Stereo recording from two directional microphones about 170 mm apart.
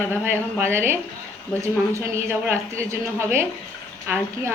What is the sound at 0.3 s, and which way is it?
Speech, 15° right (ahead or behind).